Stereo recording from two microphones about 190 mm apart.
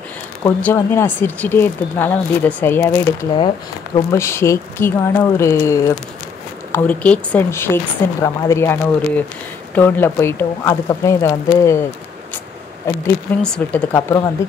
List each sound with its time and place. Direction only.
0.6 s speech: 10° left (ahead or behind)
3.3 s speech: 25° left (ahead or behind)
4.1 s speech: 15° left (ahead or behind)
9.8 s speech: 10° left (ahead or behind)
12.8 s speech: 10° left (ahead or behind)